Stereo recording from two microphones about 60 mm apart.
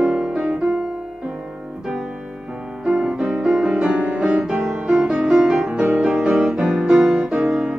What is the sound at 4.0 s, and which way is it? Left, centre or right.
Music, centre.